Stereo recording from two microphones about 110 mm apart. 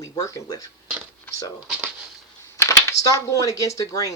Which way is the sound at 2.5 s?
30° left (ahead or behind).